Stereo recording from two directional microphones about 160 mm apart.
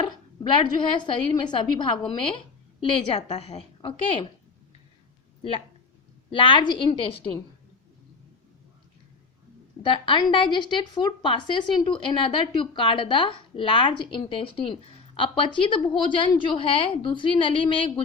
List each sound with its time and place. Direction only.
0.0 s a woman's voice: 30° left (ahead or behind)
5.4 s a woman's voice: 35° left (ahead or behind)
9.8 s a woman's voice: 30° left (ahead or behind)